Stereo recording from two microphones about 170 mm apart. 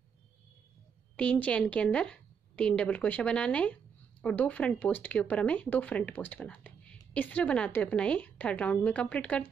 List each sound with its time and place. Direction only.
1.1 s speech: 10° left (ahead or behind)